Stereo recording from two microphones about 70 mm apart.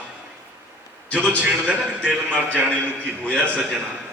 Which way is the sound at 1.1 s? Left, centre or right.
Centre.